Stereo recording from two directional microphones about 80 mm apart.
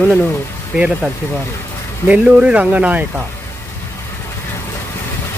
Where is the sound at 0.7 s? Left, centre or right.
Centre.